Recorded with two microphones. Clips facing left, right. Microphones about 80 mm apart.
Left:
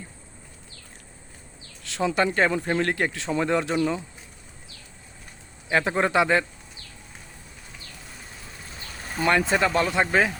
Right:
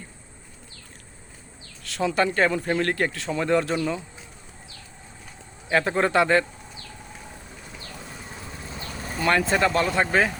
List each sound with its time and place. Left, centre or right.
1.8 s speech: left
5.6 s speech: centre
9.2 s speech: centre